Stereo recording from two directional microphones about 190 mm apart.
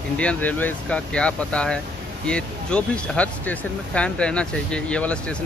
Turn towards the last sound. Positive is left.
turn(degrees=5)  # may be behind; listen again after turning